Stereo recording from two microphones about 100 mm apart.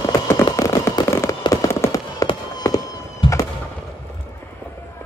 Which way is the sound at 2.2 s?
40° left (ahead or behind).